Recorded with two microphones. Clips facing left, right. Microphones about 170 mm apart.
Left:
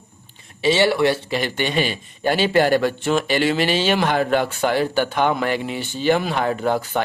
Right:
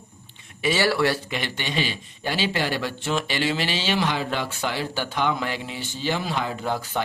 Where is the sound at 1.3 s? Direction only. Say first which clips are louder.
Left 7 dB; 45° left (ahead or behind).